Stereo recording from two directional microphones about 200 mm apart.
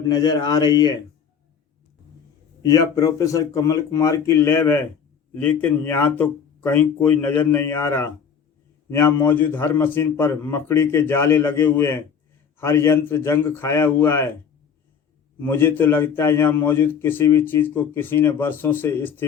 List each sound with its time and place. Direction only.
0.1 s speech: 20° left (ahead or behind)
2.6 s a man's voice: 15° left (ahead or behind)
15.4 s a man's voice: 10° left (ahead or behind)